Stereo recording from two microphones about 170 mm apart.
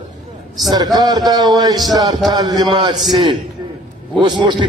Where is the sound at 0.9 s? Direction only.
25° right (ahead or behind).